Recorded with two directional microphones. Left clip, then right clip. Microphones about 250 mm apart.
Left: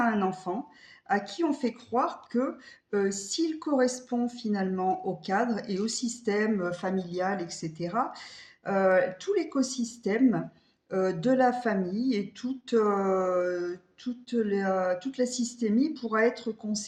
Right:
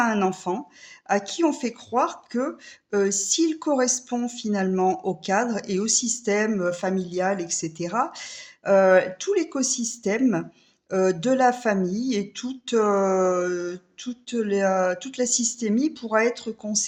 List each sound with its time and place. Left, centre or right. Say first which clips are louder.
0.0 s a sound: right 5 dB; right
0.5 s speech: right 5 dB; right
15.3 s a woman's voice: right 9 dB; right
15.5 s speech: right 3 dB; right